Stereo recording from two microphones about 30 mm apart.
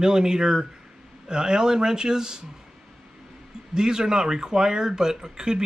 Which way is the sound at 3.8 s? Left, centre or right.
Right.